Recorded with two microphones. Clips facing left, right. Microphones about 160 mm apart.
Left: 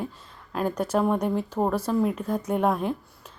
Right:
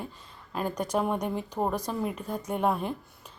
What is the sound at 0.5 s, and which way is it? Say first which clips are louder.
Speech: left 4 dB; 5° right (ahead or behind).